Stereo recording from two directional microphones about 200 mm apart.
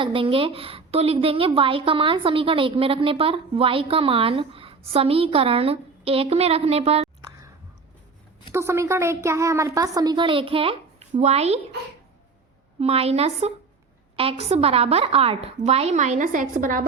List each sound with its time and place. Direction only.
0.0 s a woman's voice: 25° right (ahead or behind)
8.5 s a woman's voice: 15° right (ahead or behind); by 11.6 s 30° right (ahead or behind)
12.8 s a woman's voice: 30° right (ahead or behind)